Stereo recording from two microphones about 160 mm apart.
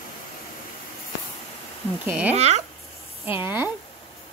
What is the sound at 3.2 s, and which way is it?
Speech, 15° right (ahead or behind).